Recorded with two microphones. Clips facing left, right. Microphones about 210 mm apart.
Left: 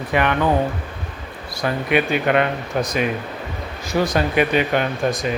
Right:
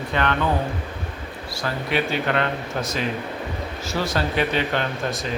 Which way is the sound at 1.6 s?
15° left (ahead or behind).